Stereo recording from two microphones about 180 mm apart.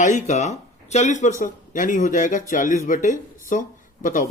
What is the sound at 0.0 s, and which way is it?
Speech, 40° left (ahead or behind).